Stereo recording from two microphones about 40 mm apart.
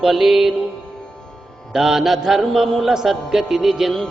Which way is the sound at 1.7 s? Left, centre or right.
Centre.